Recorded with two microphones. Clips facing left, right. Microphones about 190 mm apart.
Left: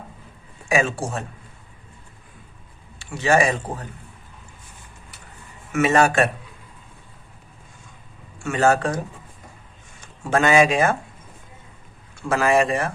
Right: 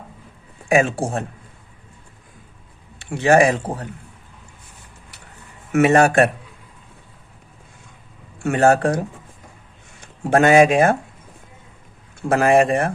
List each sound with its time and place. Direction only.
0.7 s speech: 55° right (ahead or behind)
3.0 s speech: 60° right (ahead or behind)
5.7 s speech: 55° right (ahead or behind)
8.4 s speech: 60° right (ahead or behind)
10.0 s speech: 60° right (ahead or behind)
12.3 s speech: 55° right (ahead or behind)